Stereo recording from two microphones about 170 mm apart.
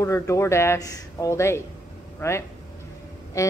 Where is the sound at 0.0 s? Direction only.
20° left (ahead or behind).